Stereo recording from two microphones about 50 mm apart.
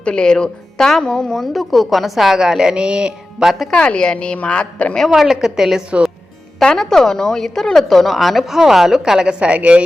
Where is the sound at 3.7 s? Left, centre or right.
Centre.